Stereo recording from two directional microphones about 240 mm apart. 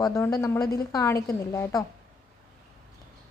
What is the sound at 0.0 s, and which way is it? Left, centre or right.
A woman's voice, centre.